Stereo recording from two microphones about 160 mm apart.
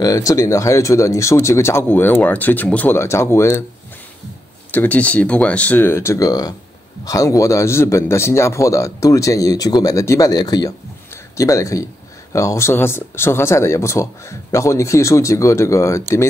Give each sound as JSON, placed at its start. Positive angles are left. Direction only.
{"t": 0.0, "sound": "speech", "side_deg": 20}
{"t": 4.6, "sound": "speech", "side_deg": 10}